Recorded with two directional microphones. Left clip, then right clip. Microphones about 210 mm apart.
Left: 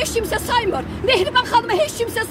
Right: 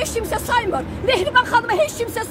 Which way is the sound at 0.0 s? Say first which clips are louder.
Left 2 dB; 10° right (ahead or behind).